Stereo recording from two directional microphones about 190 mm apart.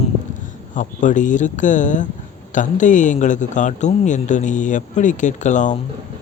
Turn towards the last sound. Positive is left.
turn(degrees=40)  # may be behind; listen again after turning